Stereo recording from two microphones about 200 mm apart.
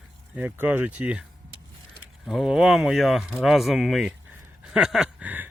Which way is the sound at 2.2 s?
Centre (ahead or behind).